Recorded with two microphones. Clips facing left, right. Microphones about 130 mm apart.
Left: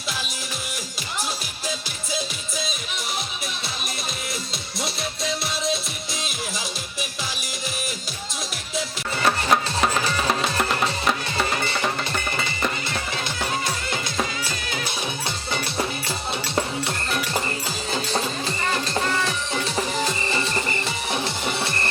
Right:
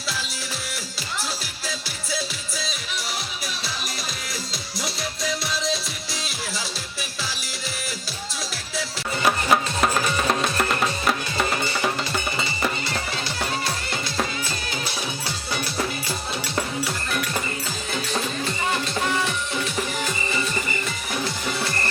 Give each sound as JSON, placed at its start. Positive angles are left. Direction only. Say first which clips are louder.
{"t": 2.1, "sound": "music", "louder": "left 1 dB", "side_deg": 20}
{"t": 4.8, "sound": "music", "louder": "left 1 dB", "side_deg": 25}
{"t": 9.2, "sound": "music", "louder": "even", "side_deg": 0}
{"t": 16.6, "sound": "music", "louder": "left 1 dB", "side_deg": 25}
{"t": 19.7, "sound": "music", "louder": "left 2 dB", "side_deg": 35}